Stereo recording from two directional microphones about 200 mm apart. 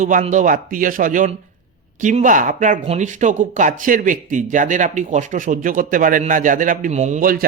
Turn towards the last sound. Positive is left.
turn(degrees=-45)  # may be behind; listen again after turning